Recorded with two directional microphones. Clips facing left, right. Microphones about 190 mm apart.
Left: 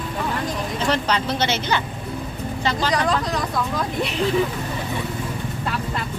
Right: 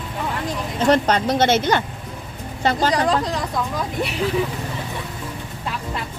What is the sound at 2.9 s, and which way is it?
Speech, 30° right (ahead or behind).